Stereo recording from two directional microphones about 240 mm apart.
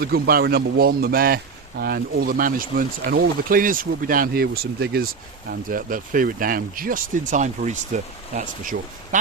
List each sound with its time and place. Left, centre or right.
0.0 s speech: right